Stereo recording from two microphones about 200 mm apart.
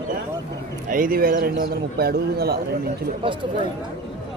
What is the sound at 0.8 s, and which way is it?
A man's voice, 45° right (ahead or behind).